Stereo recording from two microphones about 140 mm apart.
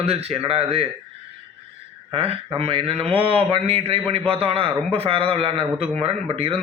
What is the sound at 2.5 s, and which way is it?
A man's voice, 45° right (ahead or behind).